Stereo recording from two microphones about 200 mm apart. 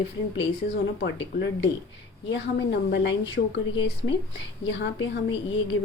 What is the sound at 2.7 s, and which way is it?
A woman's voice, 60° left (ahead or behind).